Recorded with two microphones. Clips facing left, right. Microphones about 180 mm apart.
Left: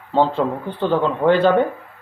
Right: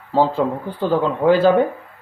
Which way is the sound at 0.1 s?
5° right (ahead or behind).